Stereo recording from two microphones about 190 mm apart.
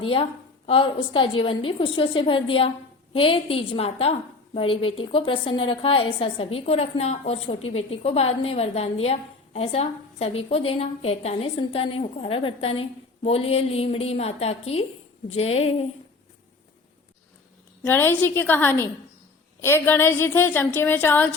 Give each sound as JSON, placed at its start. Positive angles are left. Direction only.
{"t": 0.0, "sound": "a woman's voice", "side_deg": 30}
{"t": 17.8, "sound": "a woman's voice", "side_deg": 10}